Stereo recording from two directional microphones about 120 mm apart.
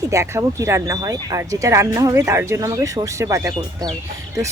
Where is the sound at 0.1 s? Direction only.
25° right (ahead or behind).